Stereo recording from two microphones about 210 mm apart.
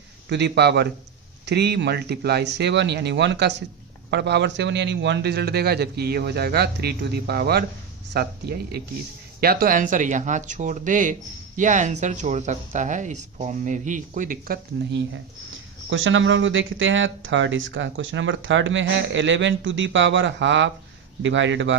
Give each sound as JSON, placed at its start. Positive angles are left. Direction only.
{"t": 0.3, "sound": "a man's voice", "side_deg": -55}
{"t": 15.9, "sound": "speech", "side_deg": -65}